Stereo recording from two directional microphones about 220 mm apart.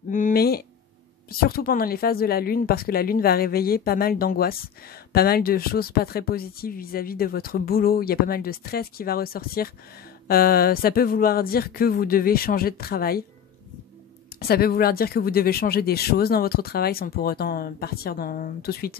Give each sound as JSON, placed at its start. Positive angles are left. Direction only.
{"t": 0.1, "sound": "a sound", "side_deg": 40}
{"t": 1.3, "sound": "speech", "side_deg": 45}
{"t": 14.4, "sound": "speech", "side_deg": 45}